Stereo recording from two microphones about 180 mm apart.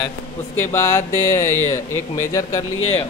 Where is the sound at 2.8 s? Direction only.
35° left (ahead or behind).